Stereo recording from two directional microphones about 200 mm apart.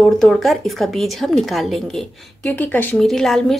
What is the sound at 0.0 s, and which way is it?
A woman's voice, centre (ahead or behind).